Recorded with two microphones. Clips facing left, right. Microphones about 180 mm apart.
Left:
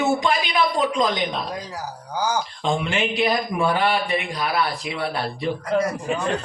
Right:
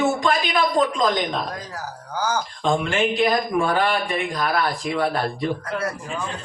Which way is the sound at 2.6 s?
45° right (ahead or behind).